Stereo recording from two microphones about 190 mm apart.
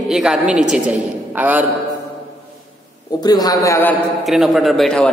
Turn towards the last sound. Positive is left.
turn(degrees=0)  # may be behind; listen again after turning